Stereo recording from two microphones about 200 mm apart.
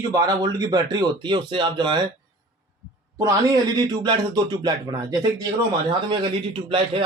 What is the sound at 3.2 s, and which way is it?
A man's voice, 15° right (ahead or behind).